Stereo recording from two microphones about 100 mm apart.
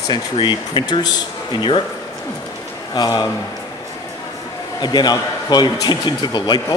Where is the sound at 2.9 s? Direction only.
45° left (ahead or behind).